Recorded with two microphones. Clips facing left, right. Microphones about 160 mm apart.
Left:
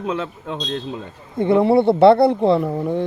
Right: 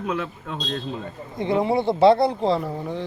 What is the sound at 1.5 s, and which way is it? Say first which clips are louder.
Speech: left 7 dB; 65° left (ahead or behind).